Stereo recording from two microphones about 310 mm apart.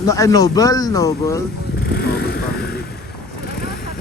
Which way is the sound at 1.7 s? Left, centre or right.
Left.